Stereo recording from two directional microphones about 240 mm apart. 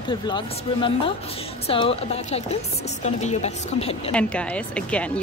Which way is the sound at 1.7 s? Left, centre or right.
Left.